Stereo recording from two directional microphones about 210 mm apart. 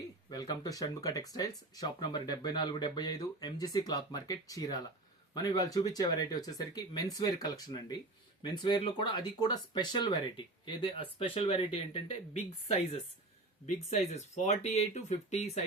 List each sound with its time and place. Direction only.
0.3 s speech: 15° left (ahead or behind)